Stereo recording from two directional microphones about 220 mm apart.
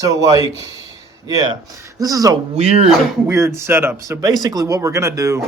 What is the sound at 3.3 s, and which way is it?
Speech, 15° right (ahead or behind).